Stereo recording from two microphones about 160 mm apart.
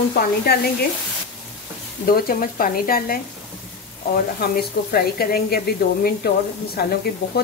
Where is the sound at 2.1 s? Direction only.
65° left (ahead or behind).